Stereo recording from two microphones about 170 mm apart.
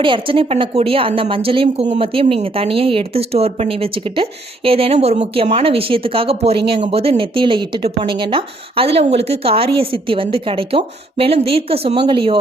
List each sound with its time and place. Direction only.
0.0 s a woman's voice: 30° right (ahead or behind)